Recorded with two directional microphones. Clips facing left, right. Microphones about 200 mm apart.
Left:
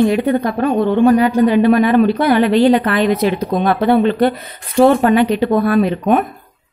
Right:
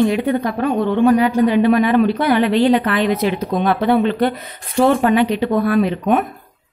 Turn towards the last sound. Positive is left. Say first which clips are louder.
# left 2 dB
turn(degrees=40)  # may be behind; listen again after turning